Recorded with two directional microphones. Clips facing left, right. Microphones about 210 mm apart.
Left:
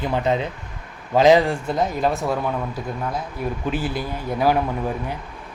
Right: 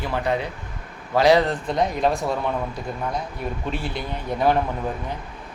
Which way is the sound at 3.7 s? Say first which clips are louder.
Left 3 dB; 5° left (ahead or behind).